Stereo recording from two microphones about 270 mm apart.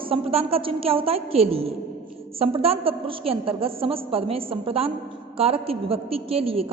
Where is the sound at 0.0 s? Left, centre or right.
Right.